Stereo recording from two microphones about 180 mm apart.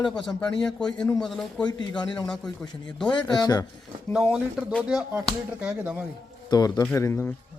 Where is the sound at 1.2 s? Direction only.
5° left (ahead or behind).